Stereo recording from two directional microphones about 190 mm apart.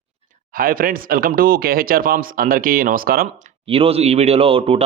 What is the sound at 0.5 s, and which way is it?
Speech, 50° right (ahead or behind).